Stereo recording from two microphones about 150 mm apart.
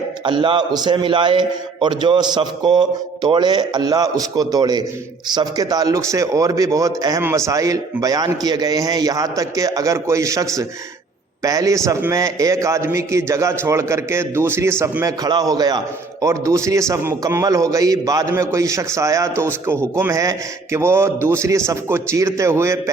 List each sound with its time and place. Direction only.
0.3 s a man's voice: 30° right (ahead or behind)